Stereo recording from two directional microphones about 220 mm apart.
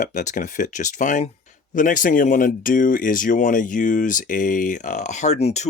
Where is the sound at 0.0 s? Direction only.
35° left (ahead or behind).